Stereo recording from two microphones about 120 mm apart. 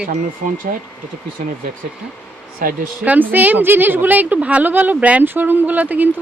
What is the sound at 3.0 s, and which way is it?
A woman's voice, 15° right (ahead or behind).